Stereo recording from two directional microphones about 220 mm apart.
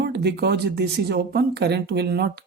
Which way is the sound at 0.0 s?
50° right (ahead or behind).